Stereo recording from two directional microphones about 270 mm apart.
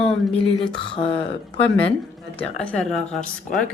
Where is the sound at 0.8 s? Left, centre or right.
Centre.